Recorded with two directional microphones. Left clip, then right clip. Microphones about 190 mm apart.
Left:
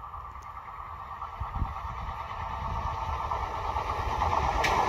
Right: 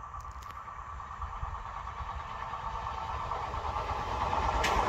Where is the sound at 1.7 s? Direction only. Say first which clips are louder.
Left 3 dB; 20° right (ahead or behind).